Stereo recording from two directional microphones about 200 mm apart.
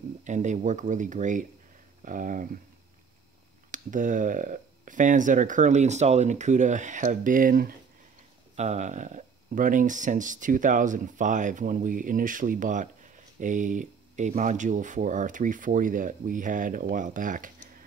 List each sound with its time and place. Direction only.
0.2 s speech: 35° right (ahead or behind)
3.7 s speech: 40° right (ahead or behind)